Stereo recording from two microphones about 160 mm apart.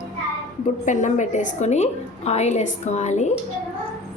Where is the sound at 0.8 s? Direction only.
50° left (ahead or behind).